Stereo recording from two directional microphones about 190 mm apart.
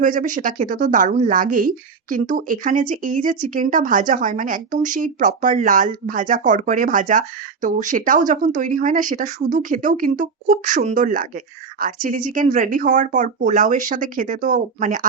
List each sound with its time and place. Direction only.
0.0 s speech: 45° right (ahead or behind)